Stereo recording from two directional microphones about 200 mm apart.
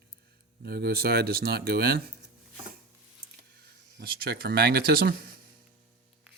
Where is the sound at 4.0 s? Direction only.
50° right (ahead or behind).